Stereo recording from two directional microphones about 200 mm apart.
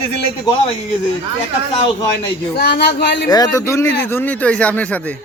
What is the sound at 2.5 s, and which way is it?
Speech, 55° left (ahead or behind).